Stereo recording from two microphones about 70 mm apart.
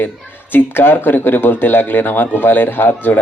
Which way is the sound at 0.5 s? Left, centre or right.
Left.